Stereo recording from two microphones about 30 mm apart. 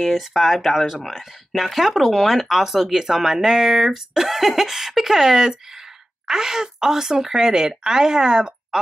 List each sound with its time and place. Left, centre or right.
0.0 s speech: centre; by 8.5 s right